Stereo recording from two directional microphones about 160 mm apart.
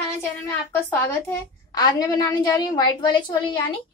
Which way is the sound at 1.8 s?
25° left (ahead or behind).